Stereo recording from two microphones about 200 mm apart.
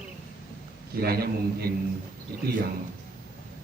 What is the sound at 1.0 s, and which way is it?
Speech, 50° right (ahead or behind).